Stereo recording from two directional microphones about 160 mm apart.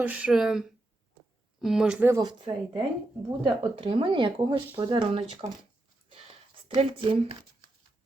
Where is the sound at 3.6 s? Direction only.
35° right (ahead or behind).